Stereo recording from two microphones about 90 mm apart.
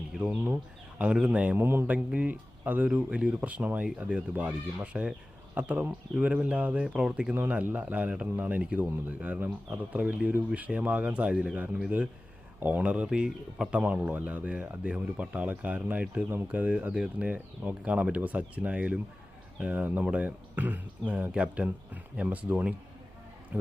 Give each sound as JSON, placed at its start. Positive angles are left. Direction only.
{"t": 0.1, "sound": "a man's voice", "side_deg": -5}
{"t": 1.5, "sound": "a man's voice", "side_deg": -25}